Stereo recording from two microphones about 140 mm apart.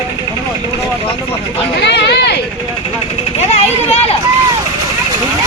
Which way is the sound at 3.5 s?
45° left (ahead or behind).